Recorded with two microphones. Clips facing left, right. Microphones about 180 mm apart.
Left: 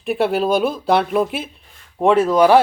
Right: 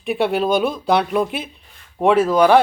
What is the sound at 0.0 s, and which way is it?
Speech, centre (ahead or behind).